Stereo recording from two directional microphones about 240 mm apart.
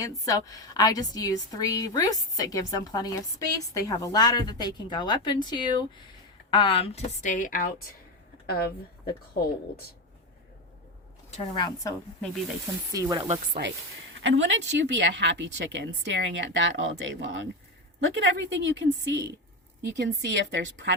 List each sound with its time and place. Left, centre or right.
0.0 s a woman's voice: centre; by 7.7 s left
11.3 s a woman's voice: centre
12.9 s speech: centre
14.2 s speech: right